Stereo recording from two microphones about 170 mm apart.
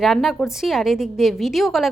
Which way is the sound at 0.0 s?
Centre (ahead or behind).